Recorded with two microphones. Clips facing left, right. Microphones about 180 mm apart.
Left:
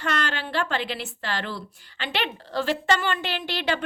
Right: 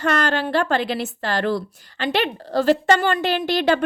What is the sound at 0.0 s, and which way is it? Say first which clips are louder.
A woman's voice: right 7 dB; 45° right (ahead or behind).